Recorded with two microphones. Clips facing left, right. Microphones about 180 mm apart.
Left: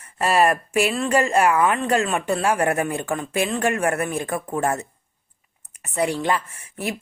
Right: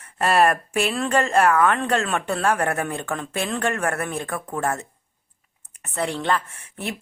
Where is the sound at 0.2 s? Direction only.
5° left (ahead or behind); by 4.9 s 20° left (ahead or behind).